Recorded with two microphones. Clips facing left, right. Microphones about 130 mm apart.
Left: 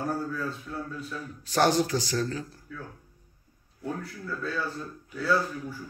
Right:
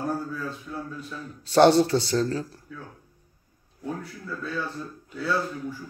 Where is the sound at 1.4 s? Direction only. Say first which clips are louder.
Right 7 dB; 30° right (ahead or behind).